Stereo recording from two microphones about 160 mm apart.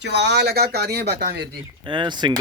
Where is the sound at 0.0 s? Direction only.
90° right.